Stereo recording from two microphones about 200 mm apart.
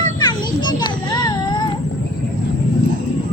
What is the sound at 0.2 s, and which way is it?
Children playing, 20° left (ahead or behind).